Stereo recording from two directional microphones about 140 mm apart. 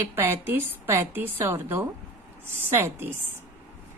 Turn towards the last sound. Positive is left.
turn(degrees=-15)  # may be behind; listen again after turning